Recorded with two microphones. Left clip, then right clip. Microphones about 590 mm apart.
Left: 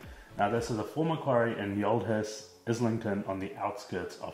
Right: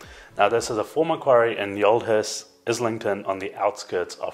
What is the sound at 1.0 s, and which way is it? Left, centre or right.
Speech, right.